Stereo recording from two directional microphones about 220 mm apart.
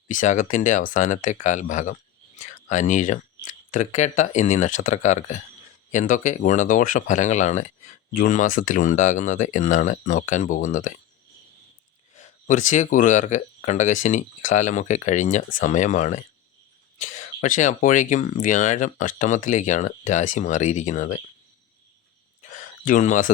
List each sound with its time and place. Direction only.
0.1 s speech: 35° left (ahead or behind)
12.1 s speech: 35° left (ahead or behind)
22.4 s a sound: 35° left (ahead or behind)